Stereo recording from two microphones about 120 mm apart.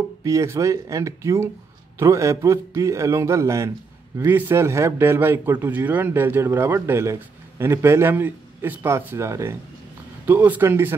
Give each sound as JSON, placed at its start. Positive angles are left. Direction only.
{"t": 0.2, "sound": "a man's voice", "side_deg": -25}